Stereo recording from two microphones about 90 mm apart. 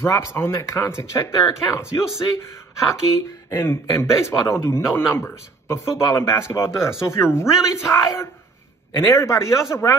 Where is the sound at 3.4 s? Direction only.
30° left (ahead or behind).